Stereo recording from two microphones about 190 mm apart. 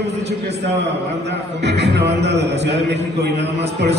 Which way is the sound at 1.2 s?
65° right (ahead or behind).